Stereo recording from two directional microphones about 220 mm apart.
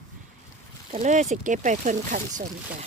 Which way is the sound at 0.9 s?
35° right (ahead or behind).